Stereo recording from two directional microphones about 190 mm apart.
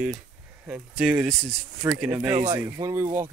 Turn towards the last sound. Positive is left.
turn(degrees=-15)  # may be behind; listen again after turning